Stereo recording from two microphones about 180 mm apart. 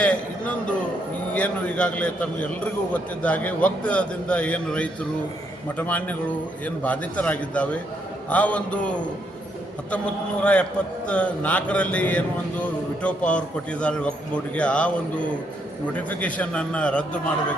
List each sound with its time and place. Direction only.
0.0 s a sound: 5° left (ahead or behind)
1.3 s a man's voice: 10° left (ahead or behind)
10.4 s a man's voice: 5° left (ahead or behind)